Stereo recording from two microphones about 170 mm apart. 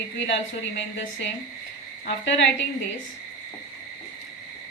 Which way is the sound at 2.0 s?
90° left.